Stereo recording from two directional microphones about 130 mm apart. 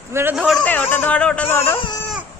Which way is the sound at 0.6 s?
15° left (ahead or behind).